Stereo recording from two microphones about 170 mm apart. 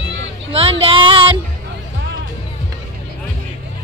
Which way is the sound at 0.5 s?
30° right (ahead or behind).